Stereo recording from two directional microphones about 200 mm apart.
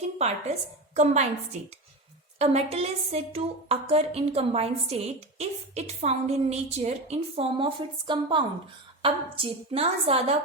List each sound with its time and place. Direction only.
0.9 s a woman's voice: 35° right (ahead or behind)
2.4 s a woman's voice: 30° right (ahead or behind)